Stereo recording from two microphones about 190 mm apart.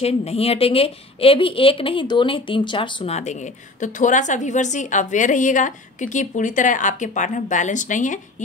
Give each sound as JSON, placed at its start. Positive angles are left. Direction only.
{"t": 0.0, "sound": "a woman's voice", "side_deg": 35}